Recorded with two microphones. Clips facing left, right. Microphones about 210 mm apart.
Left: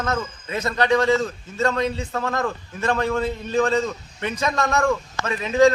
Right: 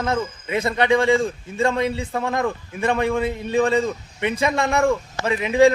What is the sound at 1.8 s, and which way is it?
A man's voice, 15° right (ahead or behind).